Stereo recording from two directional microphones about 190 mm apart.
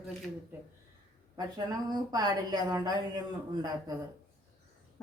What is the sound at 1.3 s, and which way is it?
A woman's voice, 20° right (ahead or behind).